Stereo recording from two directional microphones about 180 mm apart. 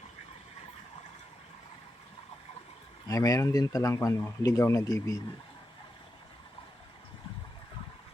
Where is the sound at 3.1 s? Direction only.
20° left (ahead or behind).